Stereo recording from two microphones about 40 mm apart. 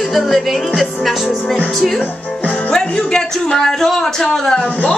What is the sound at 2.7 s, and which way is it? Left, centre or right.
A man's voice, centre.